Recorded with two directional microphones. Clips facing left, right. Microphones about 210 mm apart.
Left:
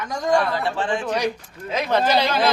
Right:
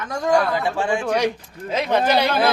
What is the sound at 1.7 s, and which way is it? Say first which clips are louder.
Speech: right 2 dB; 25° right (ahead or behind).